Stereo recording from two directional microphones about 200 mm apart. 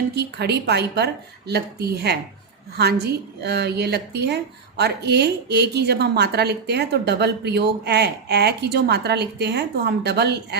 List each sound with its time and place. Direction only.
0.2 s a woman's voice: 55° right (ahead or behind)